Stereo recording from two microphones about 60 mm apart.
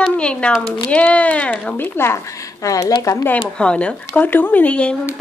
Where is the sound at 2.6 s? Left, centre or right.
Left.